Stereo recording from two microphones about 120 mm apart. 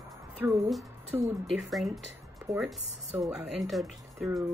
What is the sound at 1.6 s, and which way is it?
Speech, centre (ahead or behind).